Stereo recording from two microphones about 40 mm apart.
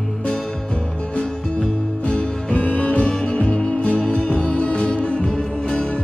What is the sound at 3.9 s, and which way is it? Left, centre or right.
Music, left.